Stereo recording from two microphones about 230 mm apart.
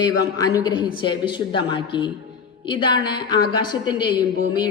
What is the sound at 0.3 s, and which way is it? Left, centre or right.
A woman's voice, centre.